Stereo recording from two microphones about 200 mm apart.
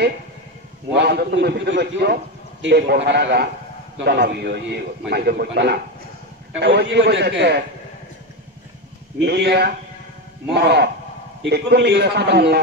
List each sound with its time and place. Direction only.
0.9 s a man's voice: 55° right (ahead or behind)
9.2 s a man's voice: 55° right (ahead or behind)